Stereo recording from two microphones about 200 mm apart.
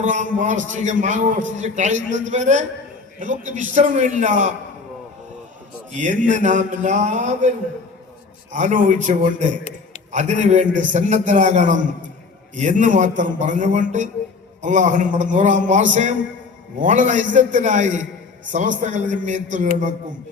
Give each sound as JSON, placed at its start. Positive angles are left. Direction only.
{"t": 0.0, "sound": "a man's voice", "side_deg": -40}
{"t": 5.9, "sound": "a man's voice", "side_deg": -40}
{"t": 8.5, "sound": "a man's voice", "side_deg": -40}